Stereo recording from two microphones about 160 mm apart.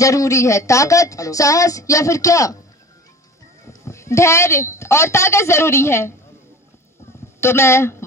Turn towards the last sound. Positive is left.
turn(degrees=15)  # may be behind; listen again after turning